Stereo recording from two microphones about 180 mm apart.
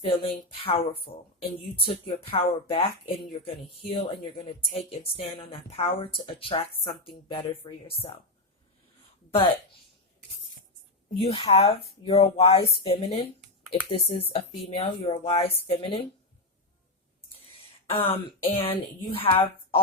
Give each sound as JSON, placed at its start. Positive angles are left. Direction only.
{"t": 0.0, "sound": "speech", "side_deg": 30}
{"t": 11.2, "sound": "speech", "side_deg": 30}
{"t": 17.9, "sound": "speech", "side_deg": 30}